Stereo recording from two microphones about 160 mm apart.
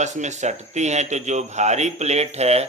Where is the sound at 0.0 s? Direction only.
50° right (ahead or behind).